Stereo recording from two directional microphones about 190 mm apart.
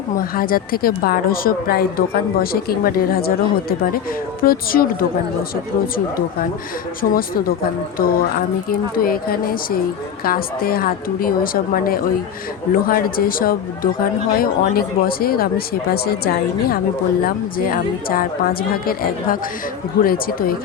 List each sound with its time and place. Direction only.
0.3 s a woman's voice: 50° left (ahead or behind)
7.0 s a woman's voice: 50° left (ahead or behind)